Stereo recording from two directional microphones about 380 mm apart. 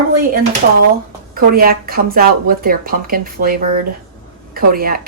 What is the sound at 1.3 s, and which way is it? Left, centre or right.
A woman's voice, right.